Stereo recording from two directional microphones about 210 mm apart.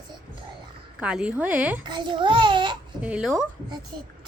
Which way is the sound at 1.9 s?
20° right (ahead or behind).